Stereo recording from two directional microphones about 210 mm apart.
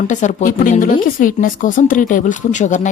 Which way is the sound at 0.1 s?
35° left (ahead or behind).